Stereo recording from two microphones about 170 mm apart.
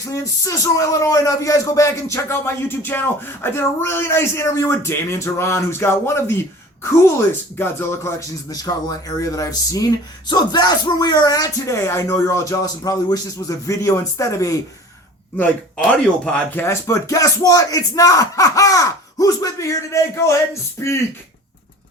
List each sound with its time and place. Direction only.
0.1 s speech: 20° left (ahead or behind)
7.6 s speech: 15° left (ahead or behind)
15.9 s speech: 10° left (ahead or behind)